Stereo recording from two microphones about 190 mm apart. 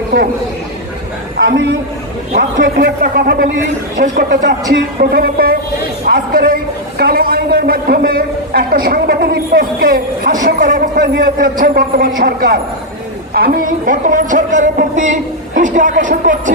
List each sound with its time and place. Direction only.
2.3 s a man's voice: 55° right (ahead or behind)
3.9 s a man's voice: 40° right (ahead or behind)
4.9 s a man's voice: 55° right (ahead or behind)